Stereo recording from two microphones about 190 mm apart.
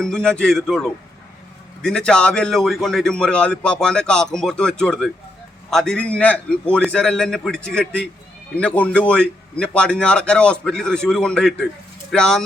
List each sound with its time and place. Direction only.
0.0 s a man's voice: 5° left (ahead or behind)